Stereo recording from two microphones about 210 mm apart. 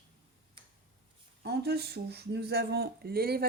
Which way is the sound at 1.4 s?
50° right (ahead or behind).